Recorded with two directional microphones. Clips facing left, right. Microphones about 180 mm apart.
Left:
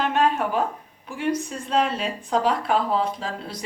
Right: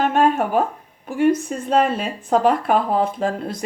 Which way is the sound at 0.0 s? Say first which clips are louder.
Right 4 dB; 50° right (ahead or behind).